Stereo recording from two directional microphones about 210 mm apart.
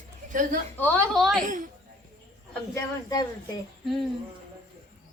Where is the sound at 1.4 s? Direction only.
40° right (ahead or behind).